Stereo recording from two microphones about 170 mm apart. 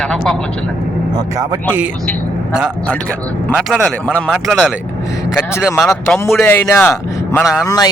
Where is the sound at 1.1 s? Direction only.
20° right (ahead or behind).